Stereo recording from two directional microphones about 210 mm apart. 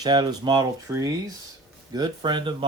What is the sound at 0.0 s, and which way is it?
Speech, 20° right (ahead or behind).